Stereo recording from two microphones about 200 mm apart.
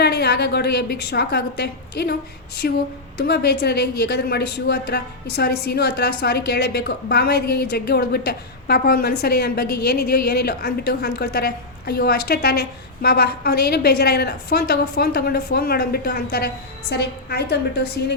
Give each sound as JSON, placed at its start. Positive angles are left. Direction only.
{"t": 0.0, "sound": "a woman's voice", "side_deg": 55}